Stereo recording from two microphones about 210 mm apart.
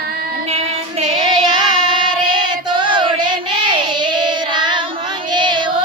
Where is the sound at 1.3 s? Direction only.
20° right (ahead or behind).